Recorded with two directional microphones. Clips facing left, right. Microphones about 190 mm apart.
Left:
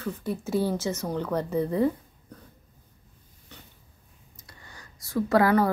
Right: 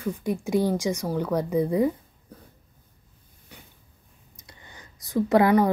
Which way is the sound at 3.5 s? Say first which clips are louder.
Right 1 dB; 10° right (ahead or behind).